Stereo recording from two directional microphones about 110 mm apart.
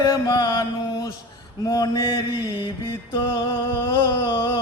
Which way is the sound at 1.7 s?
40° left (ahead or behind).